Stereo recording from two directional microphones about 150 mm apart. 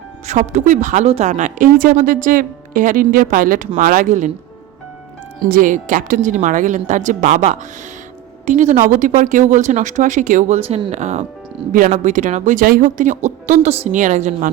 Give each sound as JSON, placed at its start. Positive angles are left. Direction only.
{"t": 0.3, "sound": "speech", "side_deg": -50}
{"t": 5.4, "sound": "speech", "side_deg": -65}